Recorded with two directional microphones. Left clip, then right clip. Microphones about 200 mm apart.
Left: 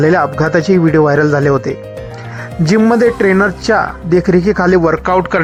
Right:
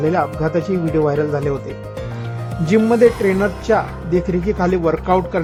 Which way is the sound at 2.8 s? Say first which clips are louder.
Left 3 dB; 15° left (ahead or behind).